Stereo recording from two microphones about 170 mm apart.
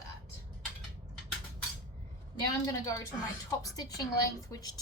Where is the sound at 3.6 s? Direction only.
20° left (ahead or behind).